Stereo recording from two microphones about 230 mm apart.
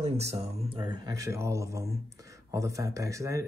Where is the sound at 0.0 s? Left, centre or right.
Right.